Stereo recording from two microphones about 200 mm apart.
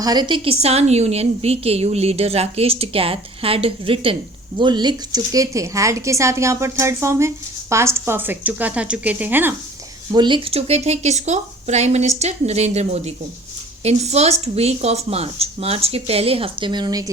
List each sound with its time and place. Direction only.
0.0 s a woman's voice: 20° right (ahead or behind)
10.1 s a woman's voice: 20° right (ahead or behind)